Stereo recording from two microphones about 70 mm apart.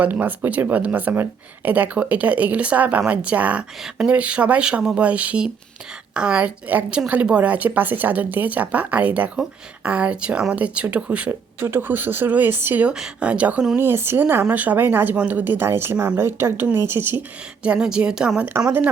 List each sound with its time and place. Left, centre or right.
0.0 s speech: right
11.3 s speech: right
12.8 s speech: centre
13.7 s speech: right
17.6 s speech: centre